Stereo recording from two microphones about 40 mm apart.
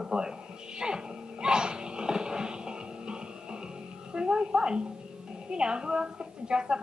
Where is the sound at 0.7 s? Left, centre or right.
Centre.